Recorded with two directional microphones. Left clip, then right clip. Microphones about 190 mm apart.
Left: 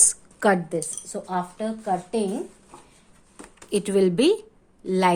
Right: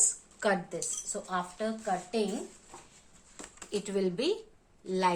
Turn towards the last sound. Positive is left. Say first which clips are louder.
# left 8 dB
turn(degrees=50)  # may be behind; listen again after turning